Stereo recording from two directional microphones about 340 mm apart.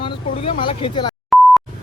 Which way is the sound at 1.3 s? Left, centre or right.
Centre.